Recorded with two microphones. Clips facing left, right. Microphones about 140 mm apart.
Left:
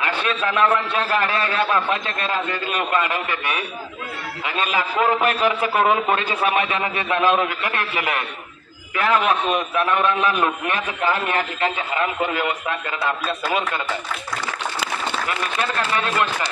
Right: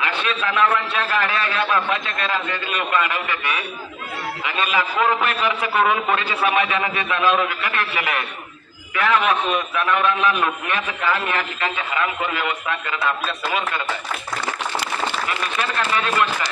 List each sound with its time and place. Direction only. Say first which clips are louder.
0.0 s a man's voice: left 1 dB; 40° left (ahead or behind)